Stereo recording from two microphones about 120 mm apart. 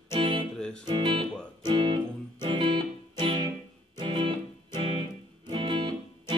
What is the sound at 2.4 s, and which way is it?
Music, 40° right (ahead or behind).